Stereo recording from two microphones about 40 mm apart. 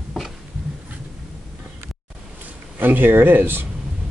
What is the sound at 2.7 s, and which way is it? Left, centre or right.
Speech, right.